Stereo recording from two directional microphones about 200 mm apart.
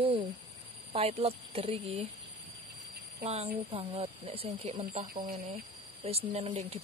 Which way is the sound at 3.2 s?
30° right (ahead or behind).